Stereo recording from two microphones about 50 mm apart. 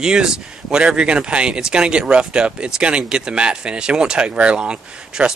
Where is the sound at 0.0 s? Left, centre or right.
Centre.